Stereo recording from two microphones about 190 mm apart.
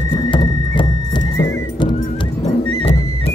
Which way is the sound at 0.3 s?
25° left (ahead or behind).